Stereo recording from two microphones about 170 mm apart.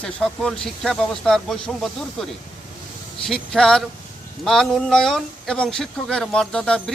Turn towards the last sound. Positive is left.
turn(degrees=5)  # may be behind; listen again after turning